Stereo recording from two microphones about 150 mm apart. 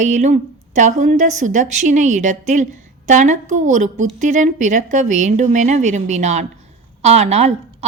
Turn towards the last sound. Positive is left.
turn(degrees=-50)  # may be behind; listen again after turning